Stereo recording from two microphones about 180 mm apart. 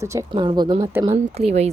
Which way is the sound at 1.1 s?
35° right (ahead or behind).